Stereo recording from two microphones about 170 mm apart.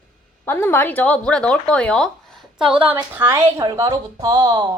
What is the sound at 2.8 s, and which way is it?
Speech, 30° right (ahead or behind).